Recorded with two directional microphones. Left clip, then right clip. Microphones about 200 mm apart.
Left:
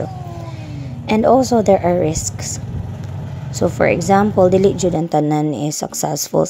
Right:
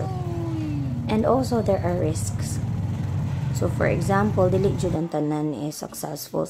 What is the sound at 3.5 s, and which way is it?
Speech, 35° left (ahead or behind).